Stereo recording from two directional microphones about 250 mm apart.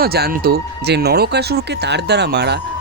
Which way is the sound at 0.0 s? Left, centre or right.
Right.